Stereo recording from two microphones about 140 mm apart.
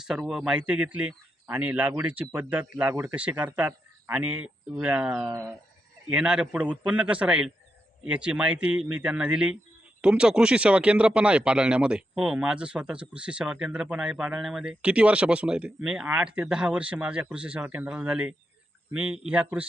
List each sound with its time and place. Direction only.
0.0 s speech: 5° right (ahead or behind)
6.1 s speech: 5° right (ahead or behind)